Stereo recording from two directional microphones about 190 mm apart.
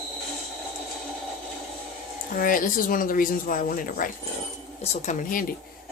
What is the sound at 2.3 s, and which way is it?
Speech, 45° left (ahead or behind).